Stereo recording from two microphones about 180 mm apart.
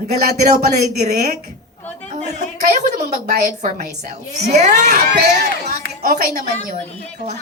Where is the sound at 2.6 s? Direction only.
60° right (ahead or behind).